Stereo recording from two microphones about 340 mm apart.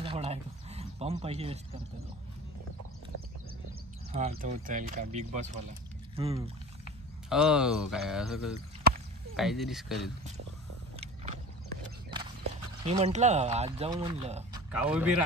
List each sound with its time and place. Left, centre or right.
0.0 s a sound: centre
4.1 s speech: centre
7.2 s speech: centre
12.8 s speech: centre
14.7 s speech: centre